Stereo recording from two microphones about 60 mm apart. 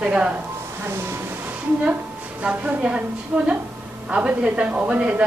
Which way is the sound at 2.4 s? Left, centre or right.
Right.